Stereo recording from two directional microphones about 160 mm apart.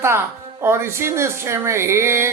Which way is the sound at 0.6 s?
15° right (ahead or behind).